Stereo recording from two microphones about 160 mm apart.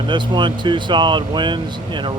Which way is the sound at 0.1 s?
30° right (ahead or behind).